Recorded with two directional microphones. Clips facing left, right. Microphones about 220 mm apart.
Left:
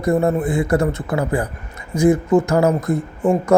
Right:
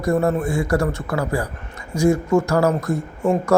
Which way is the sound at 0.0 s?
20° left (ahead or behind).